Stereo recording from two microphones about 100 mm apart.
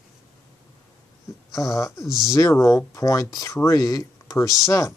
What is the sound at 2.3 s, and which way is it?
Speech, 35° left (ahead or behind).